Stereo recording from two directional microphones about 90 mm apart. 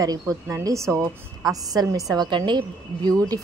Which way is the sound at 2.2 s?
60° right (ahead or behind).